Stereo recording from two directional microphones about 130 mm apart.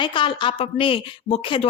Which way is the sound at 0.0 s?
40° left (ahead or behind).